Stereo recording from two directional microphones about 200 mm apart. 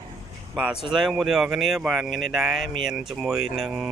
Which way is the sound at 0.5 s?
5° right (ahead or behind).